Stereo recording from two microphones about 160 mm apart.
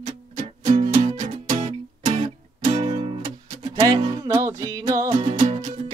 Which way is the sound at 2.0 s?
40° right (ahead or behind).